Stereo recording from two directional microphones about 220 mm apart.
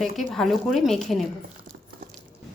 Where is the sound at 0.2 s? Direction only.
Centre (ahead or behind).